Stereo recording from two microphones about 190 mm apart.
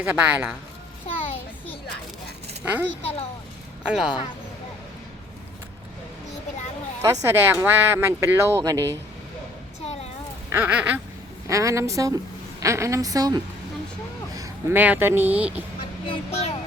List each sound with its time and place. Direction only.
0.0 s speech: 10° right (ahead or behind)
1.0 s a sound: 30° left (ahead or behind)
3.0 s speech: 30° left (ahead or behind)
3.8 s speech: 5° right (ahead or behind)
7.0 s speech: 15° right (ahead or behind)
9.8 s a sound: 35° left (ahead or behind)
10.5 s a woman's voice: 5° right (ahead or behind)
16.0 s speech: 30° left (ahead or behind)